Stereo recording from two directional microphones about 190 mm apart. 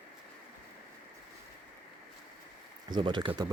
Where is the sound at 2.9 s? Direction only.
25° right (ahead or behind).